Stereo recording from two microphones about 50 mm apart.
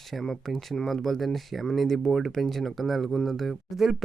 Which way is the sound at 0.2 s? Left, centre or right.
Centre.